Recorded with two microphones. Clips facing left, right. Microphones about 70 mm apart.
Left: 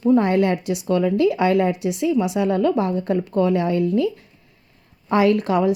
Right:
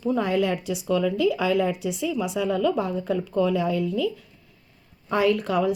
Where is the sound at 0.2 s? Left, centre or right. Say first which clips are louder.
Left 5 dB; left.